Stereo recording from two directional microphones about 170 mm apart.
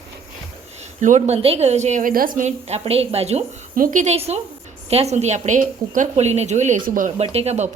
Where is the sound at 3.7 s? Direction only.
50° right (ahead or behind).